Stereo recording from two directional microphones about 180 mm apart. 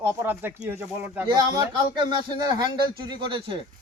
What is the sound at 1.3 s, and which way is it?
Speech, 25° right (ahead or behind).